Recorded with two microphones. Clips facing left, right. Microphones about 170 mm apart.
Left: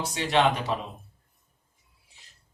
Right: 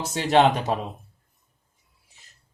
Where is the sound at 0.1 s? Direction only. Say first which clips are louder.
Right 5 dB; 45° right (ahead or behind).